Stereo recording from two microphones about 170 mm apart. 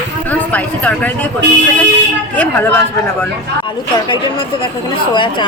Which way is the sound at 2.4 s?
10° left (ahead or behind).